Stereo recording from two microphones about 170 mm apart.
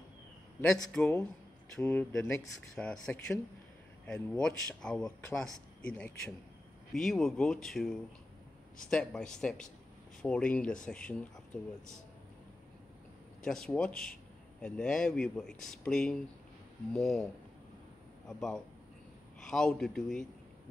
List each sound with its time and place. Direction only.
0.9 s speech: 5° left (ahead or behind)
13.4 s speech: 5° left (ahead or behind)
19.4 s speech: 5° left (ahead or behind)